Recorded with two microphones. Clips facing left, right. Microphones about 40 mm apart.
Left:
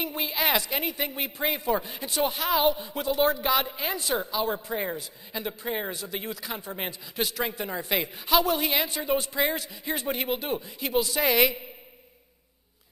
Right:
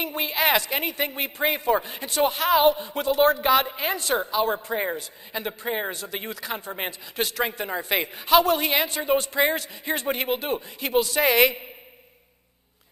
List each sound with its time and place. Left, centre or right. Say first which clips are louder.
0.0 s speech: right 4 dB; right
6.9 s a man's voice: even; centre
7.4 s speech: right 3 dB; right